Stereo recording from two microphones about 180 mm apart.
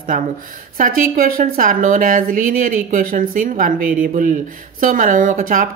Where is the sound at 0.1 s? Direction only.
50° right (ahead or behind).